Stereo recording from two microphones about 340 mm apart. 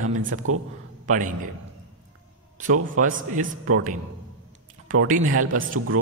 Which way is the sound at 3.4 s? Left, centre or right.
Right.